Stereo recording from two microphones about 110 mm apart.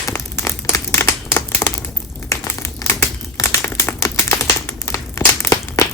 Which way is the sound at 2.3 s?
25° left (ahead or behind).